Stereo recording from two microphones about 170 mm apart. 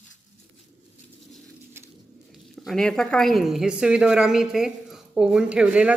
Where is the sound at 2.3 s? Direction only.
Centre (ahead or behind).